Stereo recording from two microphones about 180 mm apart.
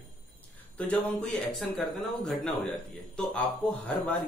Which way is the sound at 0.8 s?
10° left (ahead or behind).